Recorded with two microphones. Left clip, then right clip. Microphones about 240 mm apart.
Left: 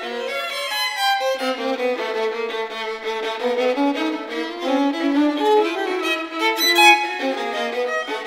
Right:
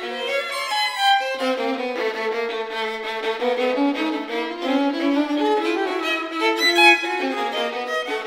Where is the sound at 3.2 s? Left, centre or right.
Left.